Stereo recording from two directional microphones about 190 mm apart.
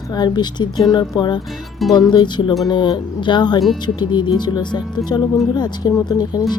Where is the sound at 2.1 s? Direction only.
25° left (ahead or behind).